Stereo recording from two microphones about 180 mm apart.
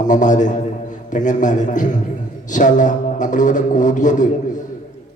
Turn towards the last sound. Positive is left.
turn(degrees=45)  # may be behind; listen again after turning